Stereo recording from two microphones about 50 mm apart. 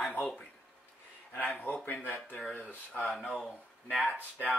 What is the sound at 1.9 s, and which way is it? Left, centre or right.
Speech, left.